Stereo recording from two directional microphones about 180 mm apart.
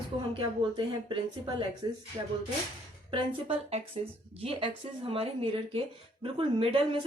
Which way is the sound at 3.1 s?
30° right (ahead or behind).